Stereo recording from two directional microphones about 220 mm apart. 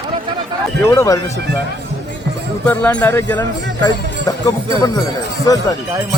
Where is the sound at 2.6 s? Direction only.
10° left (ahead or behind).